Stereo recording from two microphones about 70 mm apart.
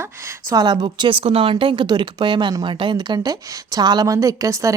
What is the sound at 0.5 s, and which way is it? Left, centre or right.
A woman's voice, right.